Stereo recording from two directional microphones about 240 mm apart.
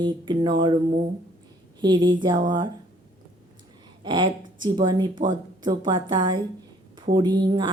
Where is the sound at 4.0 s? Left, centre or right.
Centre.